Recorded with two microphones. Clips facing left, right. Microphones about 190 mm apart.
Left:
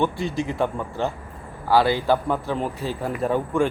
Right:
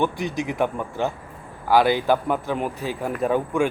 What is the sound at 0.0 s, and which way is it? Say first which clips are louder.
Speech: even; 15° right (ahead or behind).